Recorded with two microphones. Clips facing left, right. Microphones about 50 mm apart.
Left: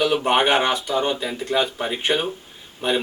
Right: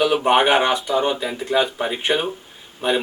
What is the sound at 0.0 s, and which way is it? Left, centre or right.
A man's voice, centre.